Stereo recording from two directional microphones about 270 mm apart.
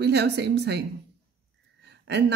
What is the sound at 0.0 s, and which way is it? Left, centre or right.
Speech, right.